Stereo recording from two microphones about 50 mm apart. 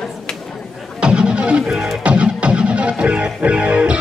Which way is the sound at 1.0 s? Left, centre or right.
Right.